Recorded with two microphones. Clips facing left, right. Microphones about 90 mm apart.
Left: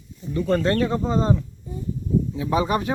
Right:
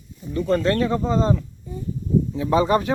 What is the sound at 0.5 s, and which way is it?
Speech, 25° left (ahead or behind).